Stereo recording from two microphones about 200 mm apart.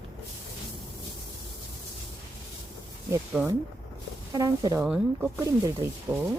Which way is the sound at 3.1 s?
10° right (ahead or behind).